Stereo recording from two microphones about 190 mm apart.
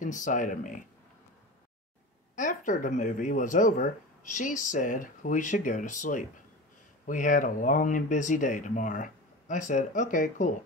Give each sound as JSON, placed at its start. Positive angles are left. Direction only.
{"t": 0.0, "sound": "speech", "side_deg": 40}
{"t": 2.3, "sound": "speech", "side_deg": 40}